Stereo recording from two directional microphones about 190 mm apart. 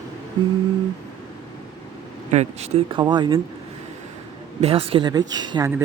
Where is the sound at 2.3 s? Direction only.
35° right (ahead or behind).